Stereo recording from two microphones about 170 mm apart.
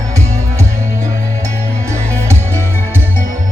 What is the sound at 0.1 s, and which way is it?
Music, 40° right (ahead or behind).